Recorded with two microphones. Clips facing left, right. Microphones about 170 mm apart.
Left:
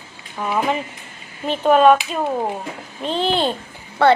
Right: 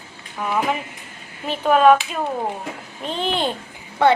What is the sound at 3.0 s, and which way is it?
Speech, 35° left (ahead or behind).